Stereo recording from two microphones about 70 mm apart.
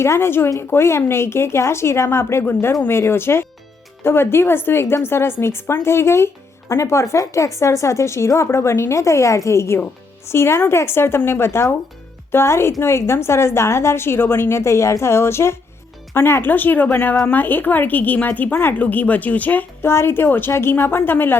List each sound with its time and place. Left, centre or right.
0.0 s a woman's voice: left
19.9 s a woman's voice: left